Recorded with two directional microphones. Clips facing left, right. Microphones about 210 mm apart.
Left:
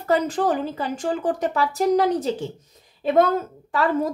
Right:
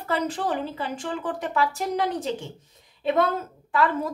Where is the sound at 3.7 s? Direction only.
40° left (ahead or behind).